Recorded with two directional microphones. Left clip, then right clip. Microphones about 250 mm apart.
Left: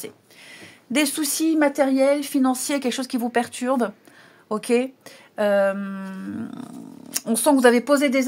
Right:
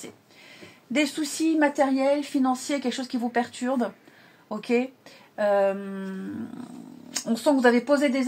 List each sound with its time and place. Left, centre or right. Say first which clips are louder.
0.0 s speech: left 5 dB; left